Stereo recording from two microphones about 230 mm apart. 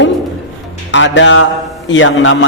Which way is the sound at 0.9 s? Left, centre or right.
Left.